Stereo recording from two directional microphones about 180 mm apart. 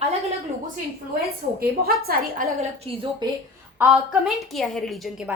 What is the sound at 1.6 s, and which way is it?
Speech, 55° right (ahead or behind).